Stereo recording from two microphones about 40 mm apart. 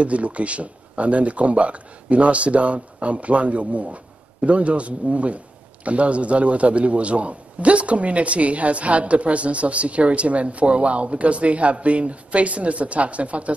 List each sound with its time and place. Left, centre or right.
0.0 s a man's voice: right